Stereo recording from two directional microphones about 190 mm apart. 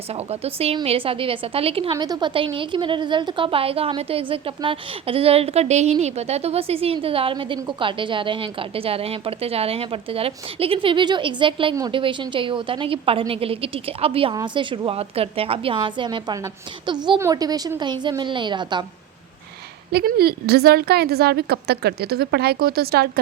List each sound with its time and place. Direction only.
0.1 s a woman's voice: 35° right (ahead or behind)
19.9 s a woman's voice: 55° right (ahead or behind)